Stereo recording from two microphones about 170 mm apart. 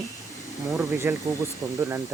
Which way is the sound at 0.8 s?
15° right (ahead or behind).